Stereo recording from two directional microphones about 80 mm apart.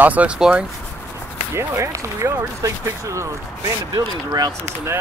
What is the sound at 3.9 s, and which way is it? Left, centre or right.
Speech, right.